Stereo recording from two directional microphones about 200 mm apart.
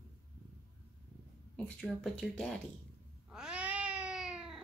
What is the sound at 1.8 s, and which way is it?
Speech, 5° left (ahead or behind).